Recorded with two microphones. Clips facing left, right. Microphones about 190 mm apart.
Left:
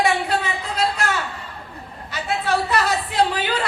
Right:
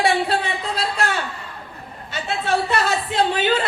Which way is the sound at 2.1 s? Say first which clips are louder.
Even; 25° right (ahead or behind).